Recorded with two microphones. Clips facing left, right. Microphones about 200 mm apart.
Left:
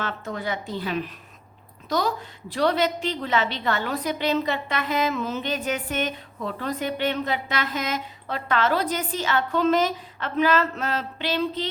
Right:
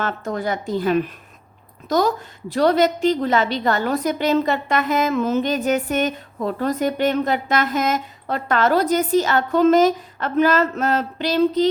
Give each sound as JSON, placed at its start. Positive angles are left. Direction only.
{"t": 0.0, "sound": "a woman's voice", "side_deg": -45}